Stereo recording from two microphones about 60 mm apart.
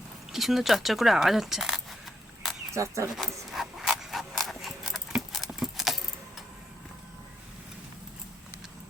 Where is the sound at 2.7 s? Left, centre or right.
Right.